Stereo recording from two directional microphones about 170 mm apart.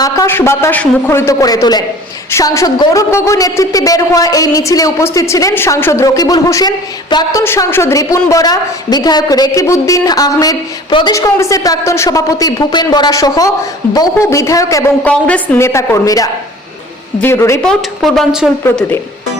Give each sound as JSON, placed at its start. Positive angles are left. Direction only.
{"t": 0.0, "sound": "a man's voice", "side_deg": 15}
{"t": 15.0, "sound": "a man's voice", "side_deg": 10}
{"t": 17.6, "sound": "a woman's voice", "side_deg": 0}